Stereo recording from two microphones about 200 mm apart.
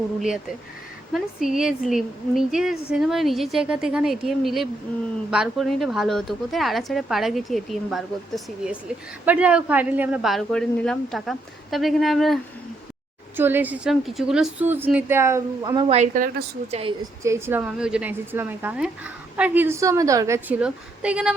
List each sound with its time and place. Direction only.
1.1 s a woman's voice: centre (ahead or behind)
9.2 s a woman's voice: 5° right (ahead or behind)
13.3 s a woman's voice: 10° right (ahead or behind)
16.0 s a woman's voice: 45° right (ahead or behind)
17.2 s a woman's voice: 15° right (ahead or behind)